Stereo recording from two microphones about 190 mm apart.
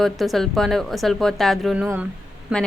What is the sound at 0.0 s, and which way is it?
A woman's voice, centre (ahead or behind).